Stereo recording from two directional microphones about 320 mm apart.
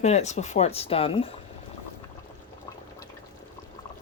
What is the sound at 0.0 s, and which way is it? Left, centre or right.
Speech, left.